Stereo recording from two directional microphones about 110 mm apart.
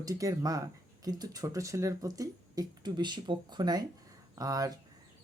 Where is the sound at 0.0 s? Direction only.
30° right (ahead or behind).